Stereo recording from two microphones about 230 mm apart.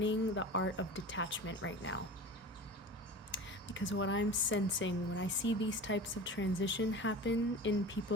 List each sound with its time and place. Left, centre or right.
0.0 s speech: left
3.3 s speech: left